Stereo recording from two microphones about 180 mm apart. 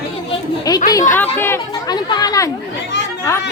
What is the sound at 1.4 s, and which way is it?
Speech, 15° left (ahead or behind).